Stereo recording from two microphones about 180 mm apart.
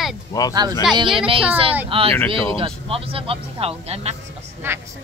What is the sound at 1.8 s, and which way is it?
Speech, 30° right (ahead or behind).